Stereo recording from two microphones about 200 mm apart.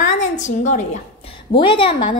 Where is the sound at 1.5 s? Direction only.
25° left (ahead or behind).